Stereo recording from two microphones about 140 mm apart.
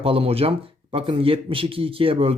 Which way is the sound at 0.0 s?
40° right (ahead or behind).